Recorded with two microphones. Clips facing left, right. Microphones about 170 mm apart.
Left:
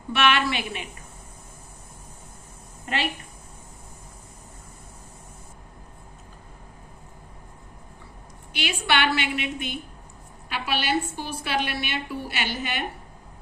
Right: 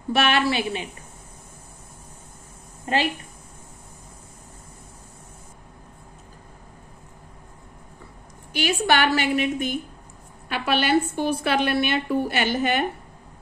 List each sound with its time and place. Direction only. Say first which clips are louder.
0.1 s a woman's voice: right 2 dB; 35° right (ahead or behind)
8.5 s a woman's voice: right 4 dB; 40° right (ahead or behind)